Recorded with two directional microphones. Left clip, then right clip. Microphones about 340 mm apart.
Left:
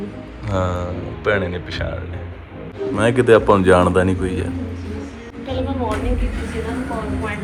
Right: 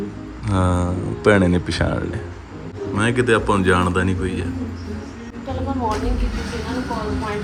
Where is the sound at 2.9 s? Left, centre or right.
Centre.